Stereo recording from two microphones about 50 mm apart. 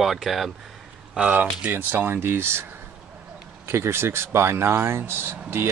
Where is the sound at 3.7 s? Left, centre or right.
Right.